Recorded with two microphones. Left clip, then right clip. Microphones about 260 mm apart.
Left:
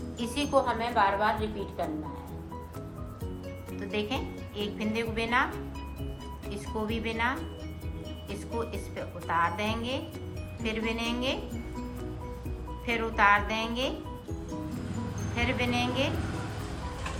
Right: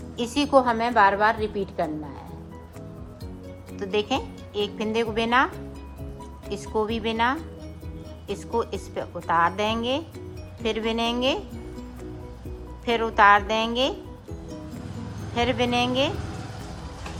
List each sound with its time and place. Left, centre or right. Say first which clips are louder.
0.2 s speech: right 7 dB; right
3.8 s speech: right 7 dB; centre
6.8 s speech: right 5 dB; centre
8.5 s speech: right 8 dB; centre
12.8 s speech: right 7 dB; right
15.4 s speech: right 7 dB; centre